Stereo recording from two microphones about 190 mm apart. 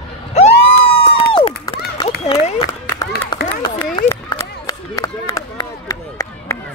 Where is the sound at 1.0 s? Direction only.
25° left (ahead or behind).